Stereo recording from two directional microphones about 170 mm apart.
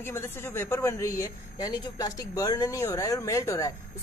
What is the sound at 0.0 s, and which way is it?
Speech, 15° left (ahead or behind).